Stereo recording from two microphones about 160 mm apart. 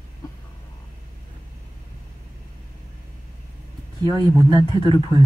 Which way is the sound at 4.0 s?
20° right (ahead or behind).